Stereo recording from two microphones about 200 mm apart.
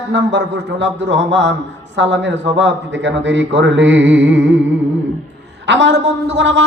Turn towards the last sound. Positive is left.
turn(degrees=-65)  # may be behind; listen again after turning